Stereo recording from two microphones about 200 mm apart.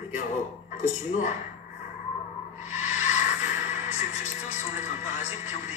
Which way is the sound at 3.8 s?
35° left (ahead or behind).